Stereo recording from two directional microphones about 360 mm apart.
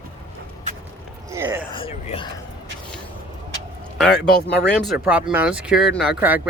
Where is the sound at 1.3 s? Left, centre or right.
Centre.